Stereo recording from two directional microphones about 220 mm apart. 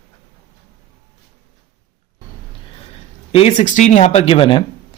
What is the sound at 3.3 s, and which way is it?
Speech, 25° left (ahead or behind).